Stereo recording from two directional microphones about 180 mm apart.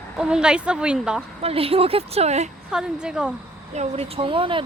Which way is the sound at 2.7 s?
5° right (ahead or behind).